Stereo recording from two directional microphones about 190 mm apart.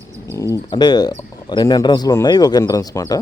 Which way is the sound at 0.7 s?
20° left (ahead or behind).